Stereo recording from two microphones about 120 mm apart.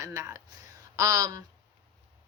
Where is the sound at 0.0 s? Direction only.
25° right (ahead or behind).